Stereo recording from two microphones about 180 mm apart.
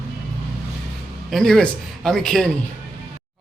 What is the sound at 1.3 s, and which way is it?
A man's voice, centre (ahead or behind).